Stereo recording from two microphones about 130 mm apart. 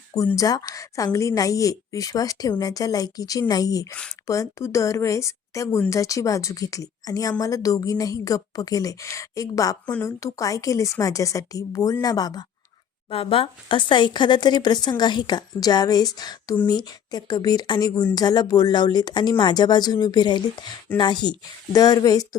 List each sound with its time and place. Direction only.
0.3 s a woman's voice: 30° left (ahead or behind)
13.1 s a woman's voice: 45° left (ahead or behind)
20.9 s speech: 15° left (ahead or behind)
21.2 s a woman's voice: 30° left (ahead or behind)